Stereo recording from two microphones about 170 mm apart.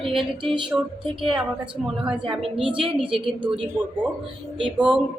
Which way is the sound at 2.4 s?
30° right (ahead or behind).